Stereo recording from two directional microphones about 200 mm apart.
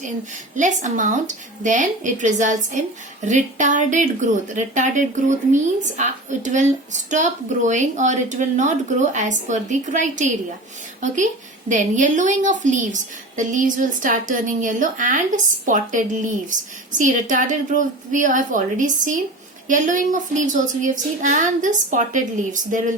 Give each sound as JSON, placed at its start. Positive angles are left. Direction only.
{"t": 0.5, "sound": "speech", "side_deg": -40}